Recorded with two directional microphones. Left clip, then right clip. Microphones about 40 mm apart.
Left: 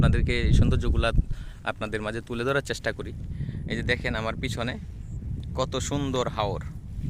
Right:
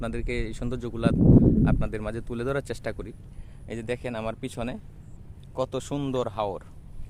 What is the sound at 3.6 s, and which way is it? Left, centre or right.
Speech, right.